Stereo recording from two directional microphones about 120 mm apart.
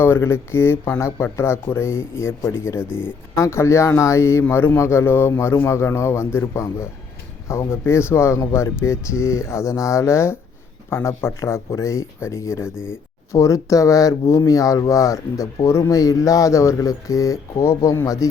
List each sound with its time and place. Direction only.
0.0 s speech: 20° left (ahead or behind)